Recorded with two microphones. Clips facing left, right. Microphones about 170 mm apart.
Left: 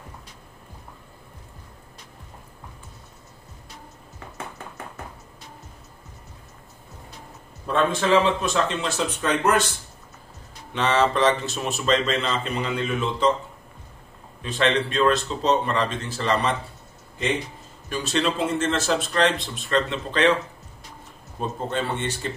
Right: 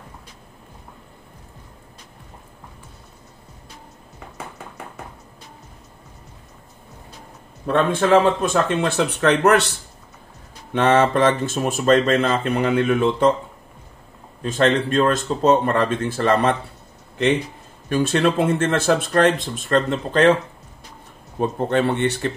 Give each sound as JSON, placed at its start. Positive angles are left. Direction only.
{"t": 7.6, "sound": "speech", "side_deg": -55}
{"t": 10.7, "sound": "speech", "side_deg": -55}
{"t": 14.4, "sound": "speech", "side_deg": -45}
{"t": 17.8, "sound": "speech", "side_deg": -55}
{"t": 21.4, "sound": "speech", "side_deg": -65}